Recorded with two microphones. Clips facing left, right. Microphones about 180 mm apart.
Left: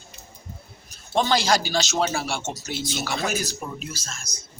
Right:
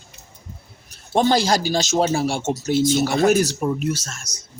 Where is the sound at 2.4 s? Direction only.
50° right (ahead or behind); by 4.0 s 65° right (ahead or behind).